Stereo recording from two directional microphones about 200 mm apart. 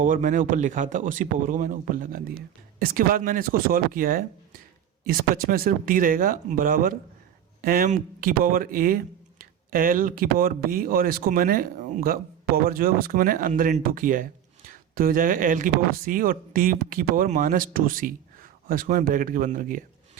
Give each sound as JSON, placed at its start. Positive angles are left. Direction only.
{"t": 0.0, "sound": "speech", "side_deg": -40}